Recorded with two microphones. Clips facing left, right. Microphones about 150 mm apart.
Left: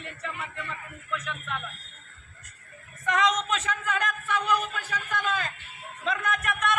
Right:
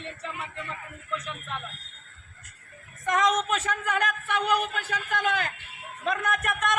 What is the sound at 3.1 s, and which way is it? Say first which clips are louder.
A man's voice: right 1 dB; 45° right (ahead or behind).